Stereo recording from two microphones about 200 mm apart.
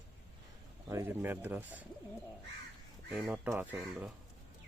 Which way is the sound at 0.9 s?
10° right (ahead or behind).